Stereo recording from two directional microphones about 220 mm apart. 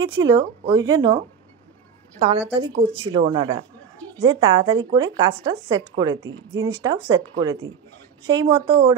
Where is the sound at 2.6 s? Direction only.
20° right (ahead or behind).